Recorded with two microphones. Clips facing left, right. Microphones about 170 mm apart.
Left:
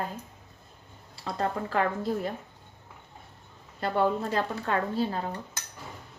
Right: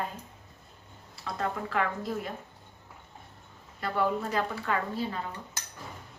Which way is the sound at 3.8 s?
30° left (ahead or behind).